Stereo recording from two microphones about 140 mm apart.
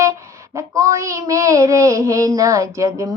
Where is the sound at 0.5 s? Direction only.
20° right (ahead or behind).